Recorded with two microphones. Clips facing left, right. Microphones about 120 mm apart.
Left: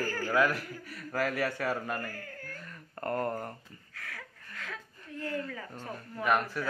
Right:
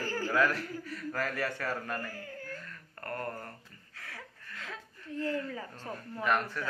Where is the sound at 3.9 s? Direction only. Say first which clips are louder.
Left 2 dB; 25° right (ahead or behind).